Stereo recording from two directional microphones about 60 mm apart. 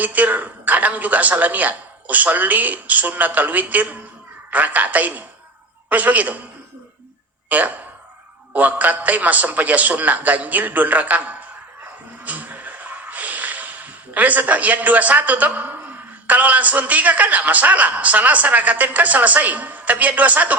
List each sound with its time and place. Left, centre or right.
0.0 s a man's voice: right
7.5 s a man's voice: right
12.2 s a sound: right
16.2 s a man's voice: right